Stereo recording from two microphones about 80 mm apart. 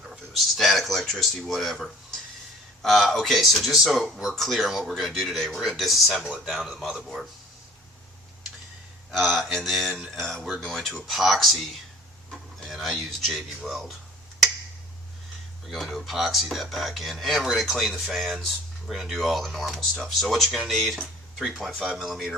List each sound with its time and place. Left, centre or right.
0.0 s speech: centre
9.1 s speech: centre
12.6 s speech: centre
15.7 s speech: centre